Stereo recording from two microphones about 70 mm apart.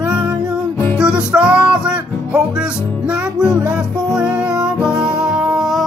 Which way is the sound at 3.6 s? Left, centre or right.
Centre.